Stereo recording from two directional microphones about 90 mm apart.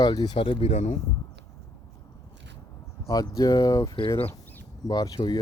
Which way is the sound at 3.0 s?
40° left (ahead or behind).